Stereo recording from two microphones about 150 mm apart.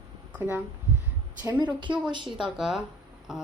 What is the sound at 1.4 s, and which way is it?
Speech, 25° right (ahead or behind).